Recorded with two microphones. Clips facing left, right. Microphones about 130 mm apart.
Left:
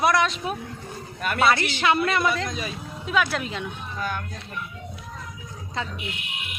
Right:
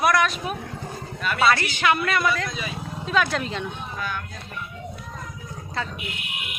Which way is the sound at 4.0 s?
45° left (ahead or behind).